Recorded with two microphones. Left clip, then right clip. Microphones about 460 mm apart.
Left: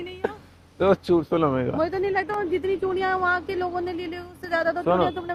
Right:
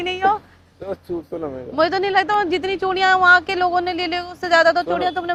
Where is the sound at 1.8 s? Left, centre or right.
Right.